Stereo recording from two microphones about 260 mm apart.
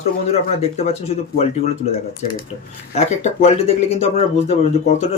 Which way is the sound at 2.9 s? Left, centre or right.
Left.